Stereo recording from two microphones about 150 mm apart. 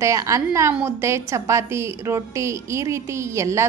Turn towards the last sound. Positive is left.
turn(degrees=-20)  # may be behind; listen again after turning